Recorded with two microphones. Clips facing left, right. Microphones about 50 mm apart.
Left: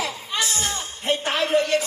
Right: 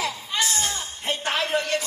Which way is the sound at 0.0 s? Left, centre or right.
Left.